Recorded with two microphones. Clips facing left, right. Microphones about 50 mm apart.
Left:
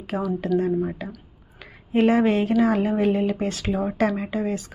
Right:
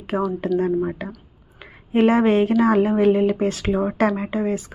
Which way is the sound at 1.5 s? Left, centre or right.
Right.